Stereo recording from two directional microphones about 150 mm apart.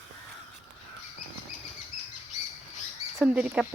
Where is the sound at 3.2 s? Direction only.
10° right (ahead or behind).